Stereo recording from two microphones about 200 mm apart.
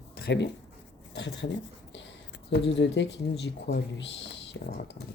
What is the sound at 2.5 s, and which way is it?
Speech, 60° left (ahead or behind).